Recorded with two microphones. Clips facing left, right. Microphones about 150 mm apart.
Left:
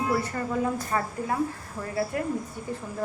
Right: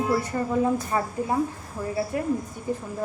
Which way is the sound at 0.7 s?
20° right (ahead or behind).